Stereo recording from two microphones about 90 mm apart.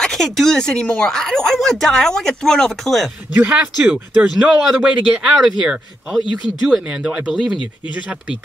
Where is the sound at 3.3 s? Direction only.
15° right (ahead or behind).